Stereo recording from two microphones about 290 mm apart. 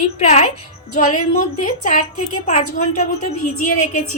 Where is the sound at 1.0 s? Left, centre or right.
Left.